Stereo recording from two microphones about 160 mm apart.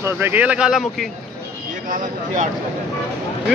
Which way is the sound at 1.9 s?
55° right (ahead or behind).